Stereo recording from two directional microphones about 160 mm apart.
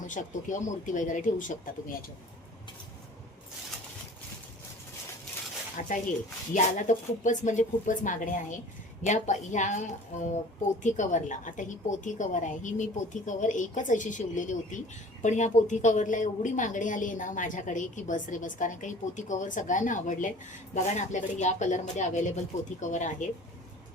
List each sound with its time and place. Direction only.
0.1 s a woman's voice: 50° left (ahead or behind)
5.8 s a woman's voice: 55° left (ahead or behind)